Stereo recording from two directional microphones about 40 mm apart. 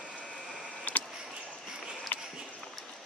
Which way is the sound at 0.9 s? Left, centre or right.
Left.